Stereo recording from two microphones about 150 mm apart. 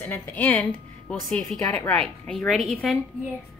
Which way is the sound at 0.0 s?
10° left (ahead or behind).